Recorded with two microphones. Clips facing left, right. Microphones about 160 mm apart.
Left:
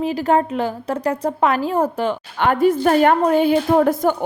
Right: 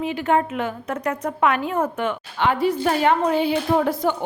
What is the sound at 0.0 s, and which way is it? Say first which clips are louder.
A woman's voice: left 3 dB; 35° left (ahead or behind).